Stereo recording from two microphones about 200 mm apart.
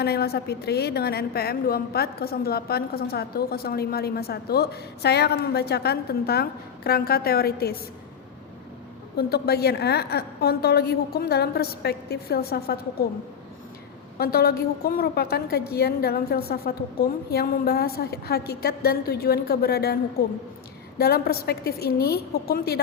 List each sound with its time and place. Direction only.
0.0 s a woman's voice: 50° left (ahead or behind)
9.1 s a woman's voice: 50° left (ahead or behind)
14.2 s a woman's voice: 50° left (ahead or behind)